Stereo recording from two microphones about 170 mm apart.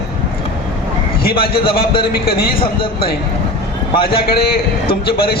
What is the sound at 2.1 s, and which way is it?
Speech, 60° left (ahead or behind).